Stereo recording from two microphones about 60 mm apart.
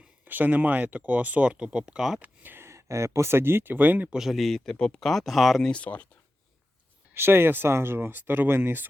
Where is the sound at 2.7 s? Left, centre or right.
Right.